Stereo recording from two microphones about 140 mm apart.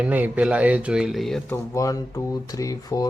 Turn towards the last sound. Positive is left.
turn(degrees=25)  # may be behind; listen again after turning